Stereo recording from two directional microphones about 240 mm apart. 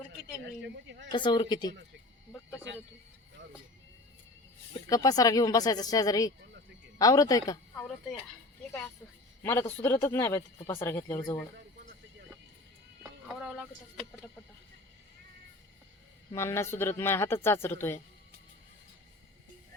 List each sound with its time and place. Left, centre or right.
0.6 s speech: right
1.1 s speech: centre
4.9 s speech: centre
9.4 s speech: centre
13.0 s music: centre
16.3 s speech: centre